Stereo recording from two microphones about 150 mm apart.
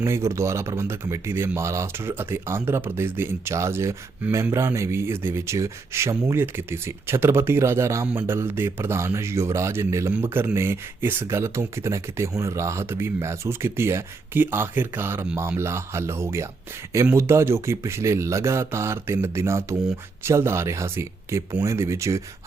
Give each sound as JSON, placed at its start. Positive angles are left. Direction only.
{"t": 0.0, "sound": "speech", "side_deg": -20}